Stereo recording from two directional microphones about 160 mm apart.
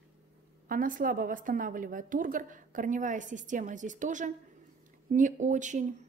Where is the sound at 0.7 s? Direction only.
60° right (ahead or behind).